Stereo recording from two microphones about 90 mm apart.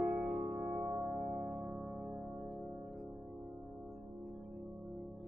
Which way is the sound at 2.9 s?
Centre (ahead or behind).